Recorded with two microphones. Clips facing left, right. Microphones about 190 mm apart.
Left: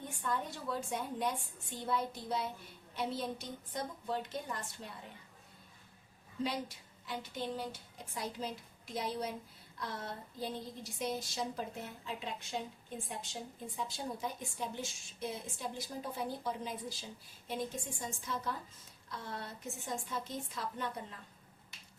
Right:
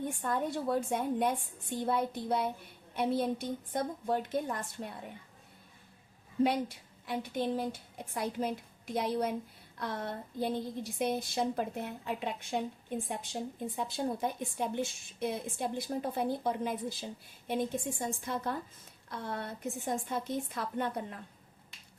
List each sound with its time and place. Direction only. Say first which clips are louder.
0.2 s a woman's voice: right 2 dB; 55° right (ahead or behind)
6.4 s a woman's voice: right 8 dB; 55° right (ahead or behind)